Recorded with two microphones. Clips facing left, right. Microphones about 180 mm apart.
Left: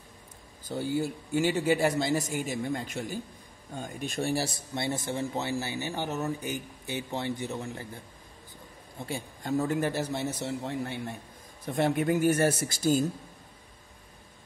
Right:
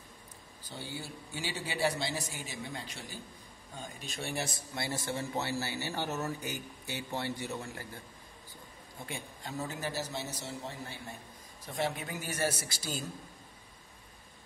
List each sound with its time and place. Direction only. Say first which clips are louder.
0.7 s speech: left 13 dB; 45° left (ahead or behind)
4.7 s speech: left 5 dB; 20° left (ahead or behind)
9.4 s a man's voice: left 11 dB; 50° left (ahead or behind)